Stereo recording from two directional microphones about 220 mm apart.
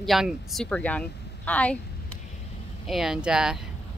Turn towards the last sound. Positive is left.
turn(degrees=-5)  # may be behind; listen again after turning